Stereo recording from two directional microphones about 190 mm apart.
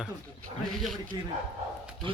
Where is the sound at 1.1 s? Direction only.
20° right (ahead or behind).